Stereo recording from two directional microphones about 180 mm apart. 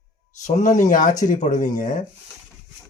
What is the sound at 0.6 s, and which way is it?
Speech, 45° left (ahead or behind).